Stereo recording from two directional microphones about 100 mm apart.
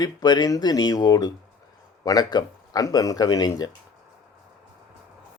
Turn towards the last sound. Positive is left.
turn(degrees=40)  # may be behind; listen again after turning